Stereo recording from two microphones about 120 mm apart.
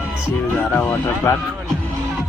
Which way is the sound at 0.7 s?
20° left (ahead or behind).